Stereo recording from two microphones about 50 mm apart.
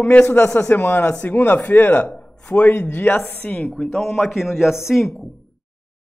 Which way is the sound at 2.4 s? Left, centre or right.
Left.